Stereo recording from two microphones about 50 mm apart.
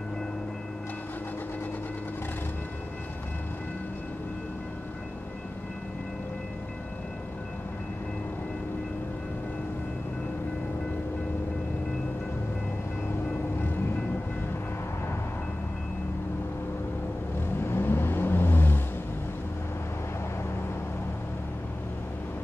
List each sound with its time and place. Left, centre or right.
17.6 s vehicle: left